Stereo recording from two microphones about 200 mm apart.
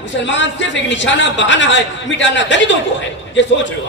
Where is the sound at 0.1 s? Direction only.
65° left (ahead or behind).